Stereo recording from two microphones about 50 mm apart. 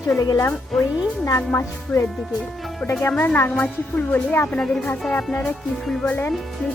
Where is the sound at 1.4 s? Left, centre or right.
Left.